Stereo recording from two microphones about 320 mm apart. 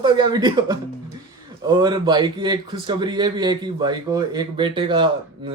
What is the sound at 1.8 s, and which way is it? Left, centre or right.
A man's voice, centre.